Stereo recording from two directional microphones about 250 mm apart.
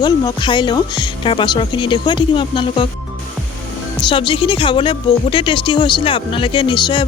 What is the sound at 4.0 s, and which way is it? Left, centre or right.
Speech, centre.